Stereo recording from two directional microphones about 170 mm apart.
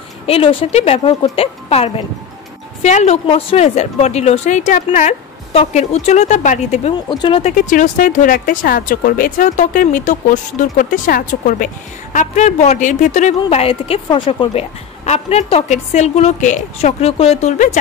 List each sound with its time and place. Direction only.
0.3 s a woman's voice: 35° left (ahead or behind)
7.1 s speech: 30° left (ahead or behind)
7.7 s speech: 50° left (ahead or behind)